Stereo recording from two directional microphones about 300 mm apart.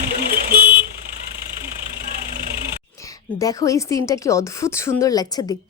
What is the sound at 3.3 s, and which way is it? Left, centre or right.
A woman's voice, centre.